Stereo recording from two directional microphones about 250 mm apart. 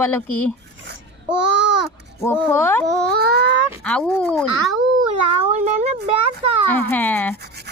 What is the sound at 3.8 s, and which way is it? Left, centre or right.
Speech, centre.